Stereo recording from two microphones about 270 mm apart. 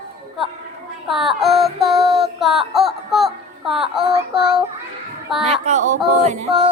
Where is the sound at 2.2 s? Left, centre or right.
Centre.